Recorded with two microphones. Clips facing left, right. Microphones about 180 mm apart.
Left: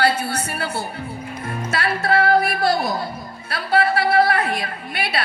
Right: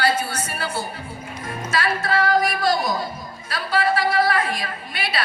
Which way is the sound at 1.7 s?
60° left (ahead or behind).